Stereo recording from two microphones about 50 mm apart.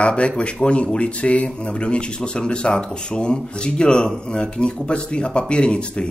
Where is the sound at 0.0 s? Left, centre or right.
Left.